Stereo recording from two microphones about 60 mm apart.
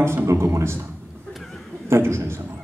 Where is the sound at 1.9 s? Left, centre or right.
Right.